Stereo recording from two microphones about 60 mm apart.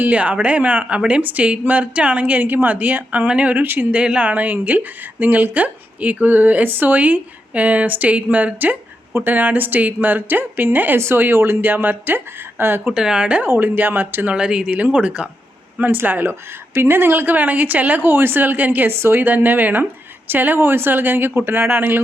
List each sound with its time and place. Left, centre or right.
0.1 s speech: right
2.4 s speech: right
3.9 s speech: centre; by 12.9 s right
12.9 s speech: centre
13.4 s speech: right
14.3 s speech: centre
14.7 s speech: right
15.8 s speech: right
18.9 s speech: right
19.2 s speech: right